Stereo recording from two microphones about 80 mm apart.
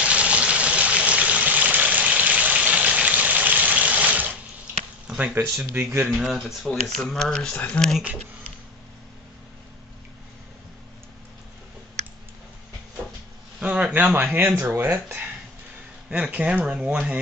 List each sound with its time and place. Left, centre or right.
0.0 s a sound: centre
5.3 s speech: right
6.0 s speech: centre
13.6 s a man's voice: centre